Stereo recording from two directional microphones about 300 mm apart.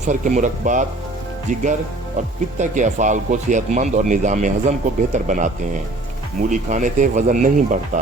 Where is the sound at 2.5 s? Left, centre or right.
Right.